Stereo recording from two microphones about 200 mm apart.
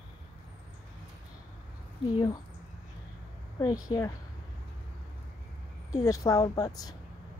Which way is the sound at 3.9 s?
25° left (ahead or behind).